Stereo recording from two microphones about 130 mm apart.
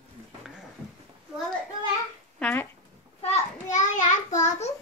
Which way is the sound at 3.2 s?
60° left (ahead or behind).